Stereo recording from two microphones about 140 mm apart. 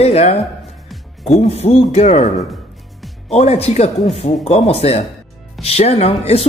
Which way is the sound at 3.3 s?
50° left (ahead or behind).